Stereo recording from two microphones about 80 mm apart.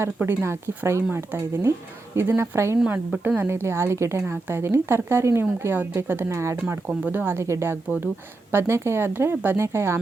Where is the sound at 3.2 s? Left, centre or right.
Right.